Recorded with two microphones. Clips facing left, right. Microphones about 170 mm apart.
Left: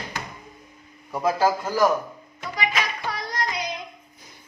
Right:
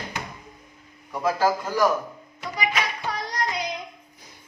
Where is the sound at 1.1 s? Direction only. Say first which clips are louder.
Left 1 dB; 10° left (ahead or behind).